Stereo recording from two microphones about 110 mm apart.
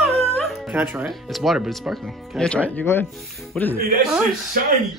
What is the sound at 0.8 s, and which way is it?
Speech, 15° right (ahead or behind).